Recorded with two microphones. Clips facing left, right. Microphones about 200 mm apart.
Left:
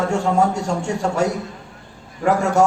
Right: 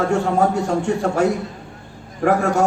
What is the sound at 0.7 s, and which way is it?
A man's voice, 60° right (ahead or behind).